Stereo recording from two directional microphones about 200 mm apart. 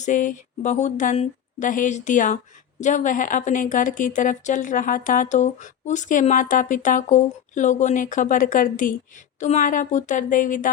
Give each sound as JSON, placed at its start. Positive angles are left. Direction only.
{"t": 0.0, "sound": "a woman's voice", "side_deg": 40}